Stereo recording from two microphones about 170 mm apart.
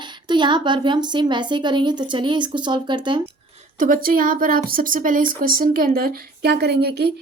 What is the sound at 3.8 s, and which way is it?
Speech, 55° right (ahead or behind).